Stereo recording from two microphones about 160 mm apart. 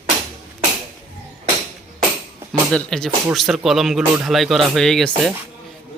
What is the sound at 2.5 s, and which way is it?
Speech, 5° left (ahead or behind).